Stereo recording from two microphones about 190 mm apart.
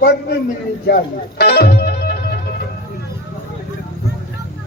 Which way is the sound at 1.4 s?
55° left (ahead or behind).